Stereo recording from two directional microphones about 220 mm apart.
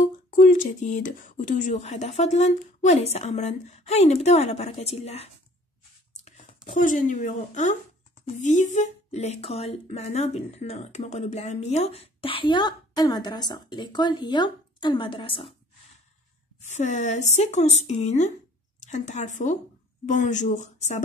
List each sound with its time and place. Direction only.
0.0 s speech: 35° left (ahead or behind)
16.6 s a woman's voice: 30° left (ahead or behind)